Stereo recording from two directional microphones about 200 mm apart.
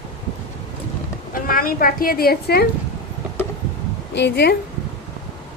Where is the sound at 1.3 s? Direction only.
45° left (ahead or behind).